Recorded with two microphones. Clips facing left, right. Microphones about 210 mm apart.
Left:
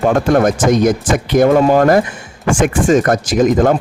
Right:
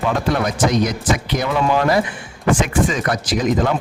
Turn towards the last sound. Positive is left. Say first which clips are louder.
# left 6 dB
turn(degrees=45)  # may be behind; listen again after turning